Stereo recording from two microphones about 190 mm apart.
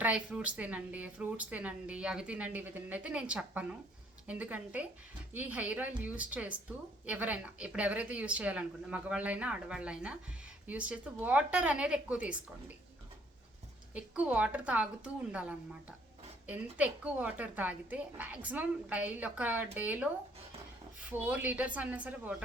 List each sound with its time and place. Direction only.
0.0 s speech: 5° right (ahead or behind)
13.9 s speech: 5° right (ahead or behind)
21.1 s speech: 10° right (ahead or behind)